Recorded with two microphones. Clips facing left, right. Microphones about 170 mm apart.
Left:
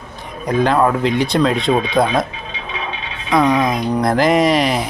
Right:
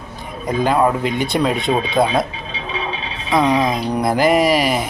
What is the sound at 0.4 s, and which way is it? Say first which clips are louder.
Speech: left 1 dB; 5° right (ahead or behind).